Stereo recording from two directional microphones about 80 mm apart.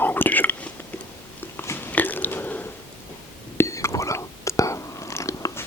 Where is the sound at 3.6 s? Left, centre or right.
Left.